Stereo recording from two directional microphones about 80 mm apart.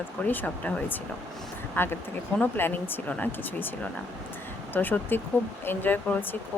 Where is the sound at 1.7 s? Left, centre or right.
Left.